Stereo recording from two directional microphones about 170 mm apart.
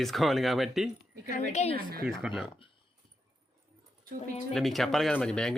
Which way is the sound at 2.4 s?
30° left (ahead or behind).